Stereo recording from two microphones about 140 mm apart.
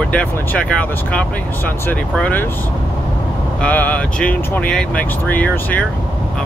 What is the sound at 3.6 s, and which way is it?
Speech, 10° left (ahead or behind).